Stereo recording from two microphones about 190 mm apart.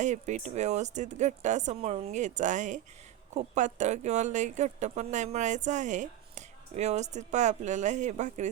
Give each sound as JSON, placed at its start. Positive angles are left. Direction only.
{"t": 0.0, "sound": "speech", "side_deg": -40}